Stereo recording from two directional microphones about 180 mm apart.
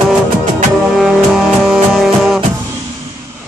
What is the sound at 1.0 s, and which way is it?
Music, centre (ahead or behind).